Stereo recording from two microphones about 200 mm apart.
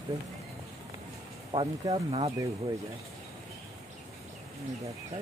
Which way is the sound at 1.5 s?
25° right (ahead or behind).